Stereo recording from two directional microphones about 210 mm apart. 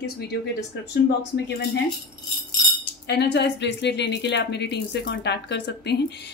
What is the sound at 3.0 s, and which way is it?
A woman's voice, 55° left (ahead or behind).